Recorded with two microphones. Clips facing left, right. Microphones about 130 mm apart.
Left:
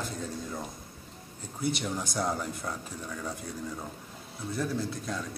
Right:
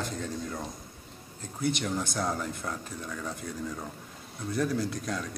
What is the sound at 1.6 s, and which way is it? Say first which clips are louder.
Speech: right 2 dB; 5° left (ahead or behind).